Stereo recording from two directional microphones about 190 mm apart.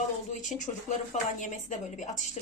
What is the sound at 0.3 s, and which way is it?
A woman's voice, 40° left (ahead or behind).